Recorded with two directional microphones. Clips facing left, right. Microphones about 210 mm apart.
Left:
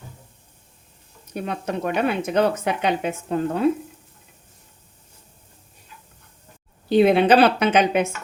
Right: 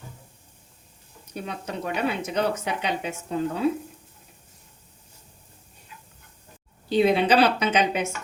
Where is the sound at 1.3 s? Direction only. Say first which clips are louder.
Left 6 dB; 55° left (ahead or behind).